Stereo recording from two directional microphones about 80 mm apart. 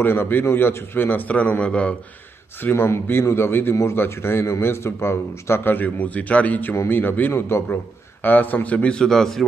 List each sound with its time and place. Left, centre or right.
0.0 s a man's voice: left
2.6 s a man's voice: left; by 9.5 s centre